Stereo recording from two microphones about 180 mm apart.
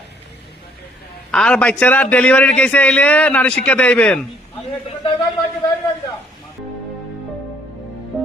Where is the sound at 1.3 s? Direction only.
5° left (ahead or behind).